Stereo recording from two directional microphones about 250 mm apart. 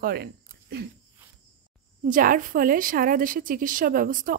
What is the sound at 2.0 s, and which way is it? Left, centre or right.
A woman's voice, right.